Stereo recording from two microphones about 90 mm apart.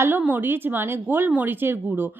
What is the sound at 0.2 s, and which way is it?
Speech, 20° right (ahead or behind).